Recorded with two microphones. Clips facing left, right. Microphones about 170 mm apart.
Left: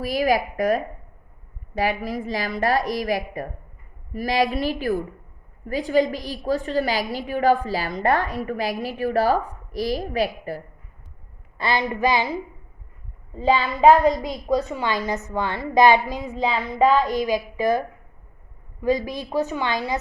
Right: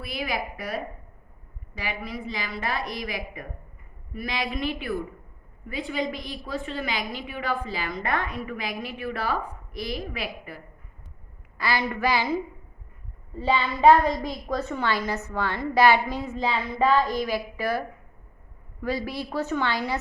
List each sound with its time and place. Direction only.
0.0 s a woman's voice: 40° left (ahead or behind)
11.5 s a woman's voice: 20° left (ahead or behind)
14.0 s a woman's voice: 15° left (ahead or behind)